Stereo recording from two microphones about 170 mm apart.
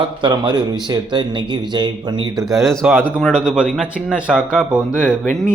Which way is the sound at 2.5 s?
Centre (ahead or behind).